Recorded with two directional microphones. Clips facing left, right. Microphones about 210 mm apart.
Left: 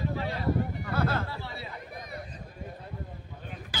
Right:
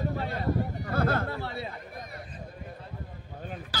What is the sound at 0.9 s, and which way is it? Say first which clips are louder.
Chatter: right 3 dB; 50° right (ahead or behind).